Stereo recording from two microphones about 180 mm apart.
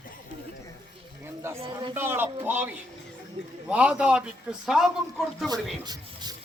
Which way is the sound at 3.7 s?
5° right (ahead or behind).